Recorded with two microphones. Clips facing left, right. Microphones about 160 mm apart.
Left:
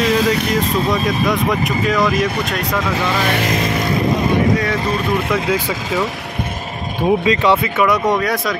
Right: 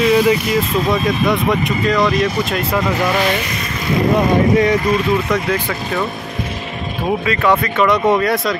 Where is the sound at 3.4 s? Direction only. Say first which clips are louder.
Left 6 dB; 90° left.